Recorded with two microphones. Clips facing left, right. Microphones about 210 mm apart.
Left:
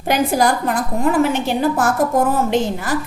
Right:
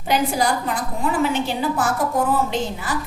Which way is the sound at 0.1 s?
50° left (ahead or behind).